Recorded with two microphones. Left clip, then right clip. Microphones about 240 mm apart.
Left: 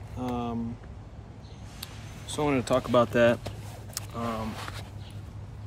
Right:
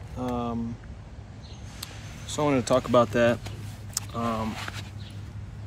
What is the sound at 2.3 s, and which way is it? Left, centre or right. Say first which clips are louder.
Speech: right 3 dB; centre.